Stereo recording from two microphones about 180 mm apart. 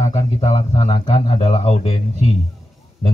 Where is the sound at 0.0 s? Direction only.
35° left (ahead or behind).